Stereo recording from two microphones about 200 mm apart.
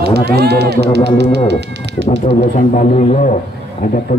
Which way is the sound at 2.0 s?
35° left (ahead or behind).